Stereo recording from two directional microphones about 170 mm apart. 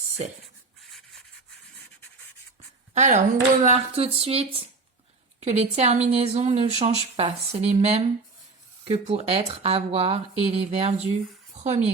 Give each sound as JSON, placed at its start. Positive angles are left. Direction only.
{"t": 2.9, "sound": "speech", "side_deg": -45}